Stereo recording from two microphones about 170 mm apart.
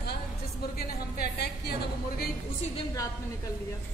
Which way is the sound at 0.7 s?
65° left (ahead or behind).